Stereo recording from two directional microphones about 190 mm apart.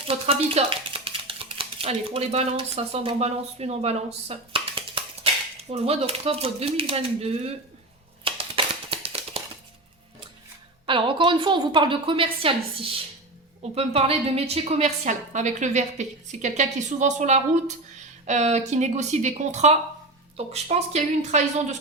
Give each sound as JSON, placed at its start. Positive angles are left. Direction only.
{"t": 0.1, "sound": "a woman's voice", "side_deg": -30}
{"t": 8.2, "sound": "a sound", "side_deg": -30}
{"t": 10.8, "sound": "a woman's voice", "side_deg": -25}